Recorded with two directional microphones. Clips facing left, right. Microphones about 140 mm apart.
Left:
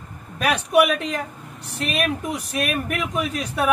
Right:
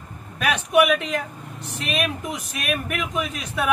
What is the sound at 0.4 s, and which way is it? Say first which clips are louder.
Speech: left 1 dB; 35° left (ahead or behind).